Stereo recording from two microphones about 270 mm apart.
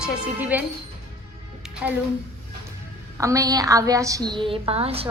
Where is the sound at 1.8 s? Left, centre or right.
Centre.